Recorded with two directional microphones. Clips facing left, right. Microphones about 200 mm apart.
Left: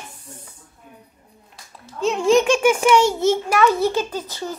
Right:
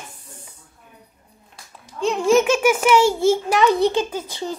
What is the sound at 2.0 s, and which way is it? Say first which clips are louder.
A child's voice: even; centre (ahead or behind).